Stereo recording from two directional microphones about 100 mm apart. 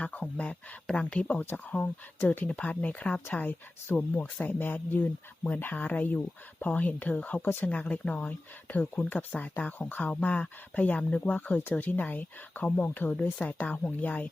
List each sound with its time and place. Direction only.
0.0 s speech: 15° left (ahead or behind)